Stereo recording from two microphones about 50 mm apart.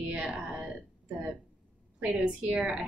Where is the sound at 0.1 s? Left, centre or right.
Centre.